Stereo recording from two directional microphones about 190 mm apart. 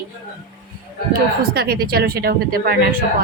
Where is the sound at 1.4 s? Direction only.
55° right (ahead or behind).